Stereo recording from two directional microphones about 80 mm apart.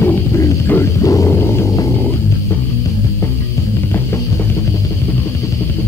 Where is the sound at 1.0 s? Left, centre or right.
Left.